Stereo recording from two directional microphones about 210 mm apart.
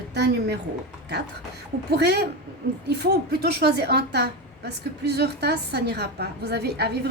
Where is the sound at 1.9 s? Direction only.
50° right (ahead or behind).